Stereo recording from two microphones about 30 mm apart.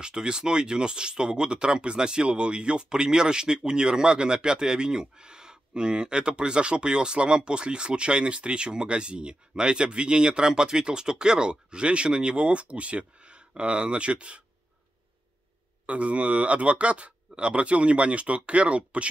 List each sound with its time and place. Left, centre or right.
0.0 s speech: right
15.9 s speech: right